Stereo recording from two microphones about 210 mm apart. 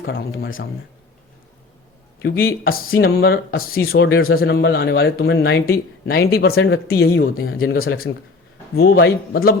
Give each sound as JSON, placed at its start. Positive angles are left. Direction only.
{"t": 0.0, "sound": "speech", "side_deg": 45}
{"t": 2.2, "sound": "speech", "side_deg": 45}
{"t": 4.0, "sound": "speech", "side_deg": 60}